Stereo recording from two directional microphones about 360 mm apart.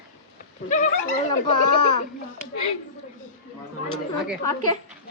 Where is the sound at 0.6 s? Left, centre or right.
Left.